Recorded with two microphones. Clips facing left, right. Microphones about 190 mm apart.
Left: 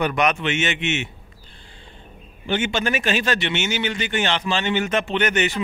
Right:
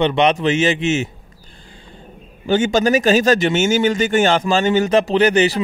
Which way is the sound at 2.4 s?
40° right (ahead or behind).